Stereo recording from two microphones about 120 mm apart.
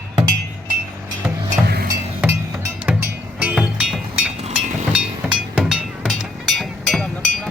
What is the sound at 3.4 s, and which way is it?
Music, 10° right (ahead or behind).